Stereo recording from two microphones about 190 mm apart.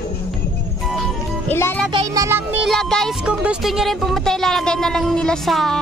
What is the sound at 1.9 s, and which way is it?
Music, 15° right (ahead or behind).